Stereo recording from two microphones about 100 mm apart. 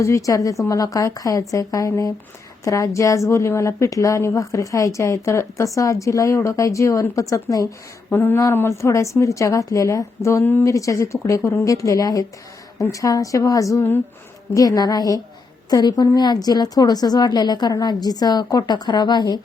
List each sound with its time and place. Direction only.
0.0 s a woman's voice: 30° left (ahead or behind)
8.1 s a woman's voice: 25° left (ahead or behind); by 19.4 s 45° left (ahead or behind)